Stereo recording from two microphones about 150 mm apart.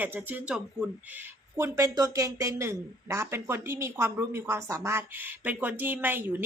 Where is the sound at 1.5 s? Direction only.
20° right (ahead or behind).